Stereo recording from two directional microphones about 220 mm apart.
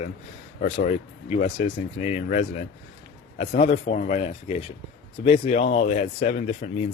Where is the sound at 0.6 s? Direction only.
35° left (ahead or behind).